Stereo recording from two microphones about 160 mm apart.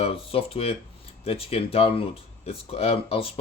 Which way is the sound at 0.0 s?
35° left (ahead or behind).